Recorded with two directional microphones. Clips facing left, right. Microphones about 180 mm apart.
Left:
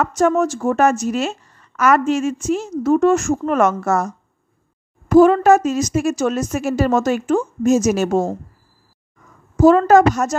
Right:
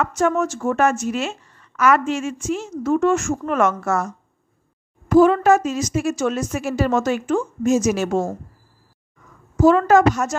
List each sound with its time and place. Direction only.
0.0 s a woman's voice: 35° left (ahead or behind)
9.6 s a woman's voice: 40° left (ahead or behind)